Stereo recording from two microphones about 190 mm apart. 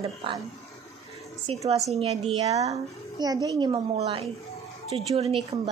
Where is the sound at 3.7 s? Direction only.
30° right (ahead or behind).